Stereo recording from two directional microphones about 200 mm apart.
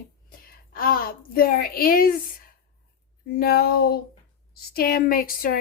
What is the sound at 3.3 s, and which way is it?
A woman's voice, 50° left (ahead or behind).